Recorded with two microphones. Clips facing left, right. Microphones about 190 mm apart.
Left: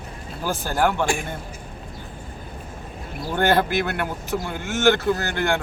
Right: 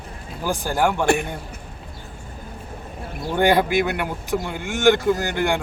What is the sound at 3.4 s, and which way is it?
Speech, 15° right (ahead or behind).